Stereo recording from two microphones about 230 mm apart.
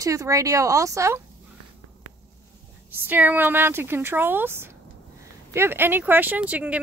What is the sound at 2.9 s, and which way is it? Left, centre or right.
A woman's voice, centre.